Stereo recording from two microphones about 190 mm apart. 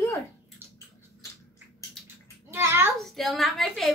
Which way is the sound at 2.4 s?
10° right (ahead or behind).